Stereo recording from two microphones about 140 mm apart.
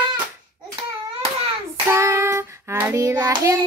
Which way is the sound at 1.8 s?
20° right (ahead or behind).